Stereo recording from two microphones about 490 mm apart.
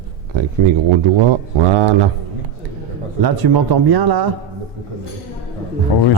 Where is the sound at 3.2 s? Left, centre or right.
Right.